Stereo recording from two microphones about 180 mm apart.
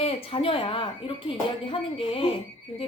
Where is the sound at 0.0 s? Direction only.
35° left (ahead or behind).